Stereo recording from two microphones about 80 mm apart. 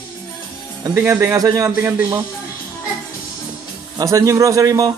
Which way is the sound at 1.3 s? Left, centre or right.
Right.